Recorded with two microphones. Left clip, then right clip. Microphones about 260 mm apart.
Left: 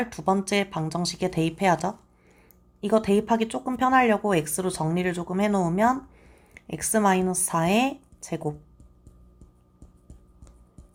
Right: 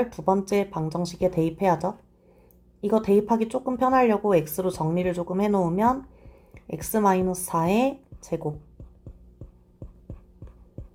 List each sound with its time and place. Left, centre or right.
0.0 s speech: left